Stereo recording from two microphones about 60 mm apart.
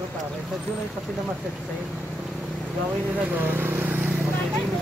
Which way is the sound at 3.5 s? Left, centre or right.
Right.